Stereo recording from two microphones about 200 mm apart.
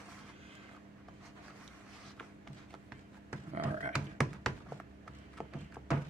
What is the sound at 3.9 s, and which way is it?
Croak, centre (ahead or behind).